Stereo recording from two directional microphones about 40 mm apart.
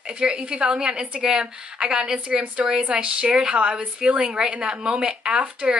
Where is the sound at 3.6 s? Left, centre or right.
Right.